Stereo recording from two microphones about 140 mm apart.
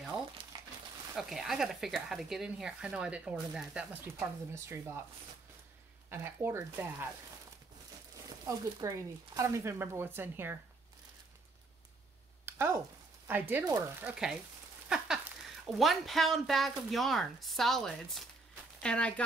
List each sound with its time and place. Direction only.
0.4 s crumpling: 40° right (ahead or behind)
1.1 s speech: centre (ahead or behind); by 5.0 s 15° right (ahead or behind)
6.0 s speech: 15° right (ahead or behind)
8.5 s speech: 25° right (ahead or behind)
12.4 s a sound: 15° right (ahead or behind)
13.3 s speech: 15° right (ahead or behind); by 19.2 s 10° left (ahead or behind)